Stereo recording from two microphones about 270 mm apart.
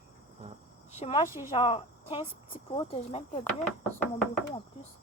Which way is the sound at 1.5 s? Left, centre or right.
Centre.